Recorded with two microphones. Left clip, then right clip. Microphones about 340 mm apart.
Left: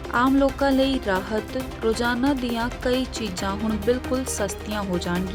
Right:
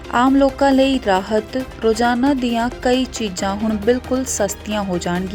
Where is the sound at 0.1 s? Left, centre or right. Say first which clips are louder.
Right 5 dB; centre.